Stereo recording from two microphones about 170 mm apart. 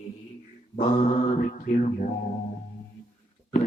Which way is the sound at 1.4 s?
50° left (ahead or behind).